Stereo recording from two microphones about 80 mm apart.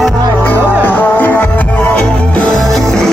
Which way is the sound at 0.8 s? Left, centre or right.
Left.